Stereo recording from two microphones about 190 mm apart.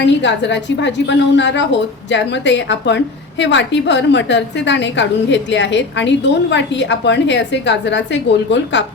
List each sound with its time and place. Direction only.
0.0 s a woman's voice: 70° left (ahead or behind)